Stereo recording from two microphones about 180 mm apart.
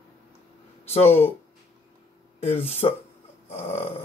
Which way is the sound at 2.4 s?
35° left (ahead or behind).